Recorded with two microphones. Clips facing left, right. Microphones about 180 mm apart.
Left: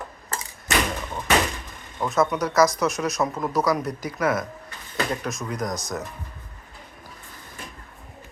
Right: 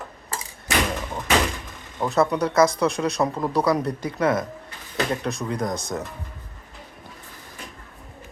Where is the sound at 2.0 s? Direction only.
35° right (ahead or behind).